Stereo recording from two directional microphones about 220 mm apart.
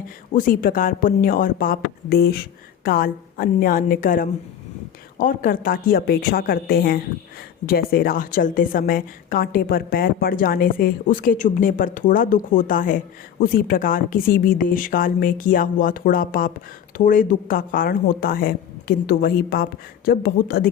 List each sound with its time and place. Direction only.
0.3 s a woman's voice: 40° left (ahead or behind)